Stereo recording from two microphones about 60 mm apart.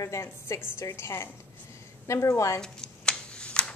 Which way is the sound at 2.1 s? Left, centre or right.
Left.